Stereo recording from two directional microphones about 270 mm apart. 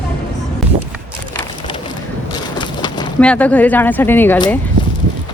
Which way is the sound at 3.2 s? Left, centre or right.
Centre.